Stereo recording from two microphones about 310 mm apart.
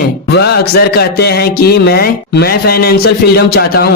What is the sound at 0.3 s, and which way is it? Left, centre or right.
A man's voice, left.